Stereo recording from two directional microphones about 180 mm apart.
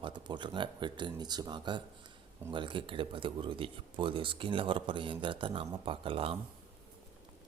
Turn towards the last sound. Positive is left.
turn(degrees=-30)  # may be behind; listen again after turning